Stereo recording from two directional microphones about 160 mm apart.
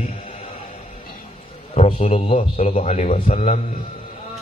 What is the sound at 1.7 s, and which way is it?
A man's voice, 45° left (ahead or behind).